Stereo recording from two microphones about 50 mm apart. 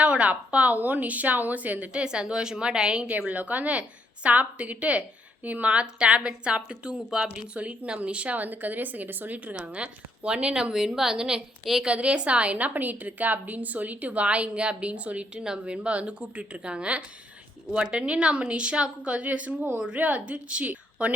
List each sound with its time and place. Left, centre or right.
0.0 s a woman's voice: right
3.1 s a woman's voice: right
9.6 s a woman's voice: right; by 11.9 s centre
11.9 s a woman's voice: right